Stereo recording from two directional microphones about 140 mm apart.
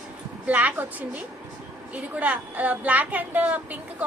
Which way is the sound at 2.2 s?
10° right (ahead or behind).